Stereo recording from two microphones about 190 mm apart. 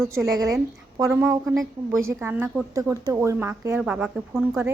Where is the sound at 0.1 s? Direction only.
15° right (ahead or behind).